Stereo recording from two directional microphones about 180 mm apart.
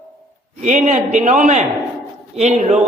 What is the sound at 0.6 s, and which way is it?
A man's voice, 40° right (ahead or behind).